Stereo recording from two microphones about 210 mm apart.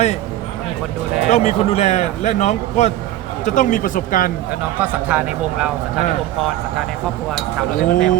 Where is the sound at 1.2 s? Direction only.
30° left (ahead or behind).